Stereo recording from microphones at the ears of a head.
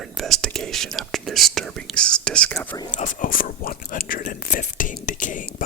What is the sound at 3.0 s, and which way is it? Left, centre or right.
Whispering, left.